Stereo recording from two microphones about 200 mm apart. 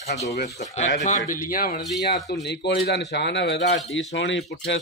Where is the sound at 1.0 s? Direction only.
40° left (ahead or behind).